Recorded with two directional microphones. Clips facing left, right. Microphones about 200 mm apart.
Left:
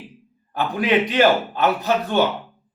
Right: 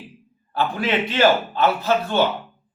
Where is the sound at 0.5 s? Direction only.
15° left (ahead or behind).